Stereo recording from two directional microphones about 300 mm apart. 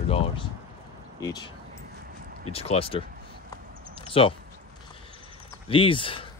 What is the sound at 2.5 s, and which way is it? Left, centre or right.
Speech, centre.